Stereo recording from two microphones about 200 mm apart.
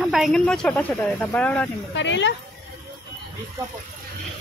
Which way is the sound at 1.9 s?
65° left (ahead or behind).